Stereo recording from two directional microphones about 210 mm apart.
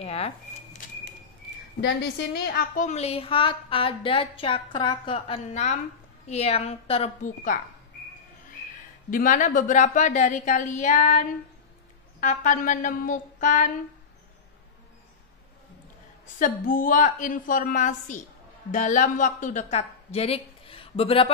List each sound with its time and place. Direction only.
0.0 s speech: 30° left (ahead or behind)
1.8 s a woman's voice: 50° left (ahead or behind)
9.1 s a woman's voice: 40° left (ahead or behind)
16.3 s a woman's voice: 40° left (ahead or behind)